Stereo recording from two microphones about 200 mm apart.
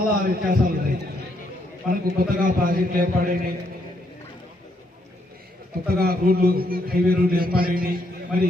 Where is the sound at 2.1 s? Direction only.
45° right (ahead or behind).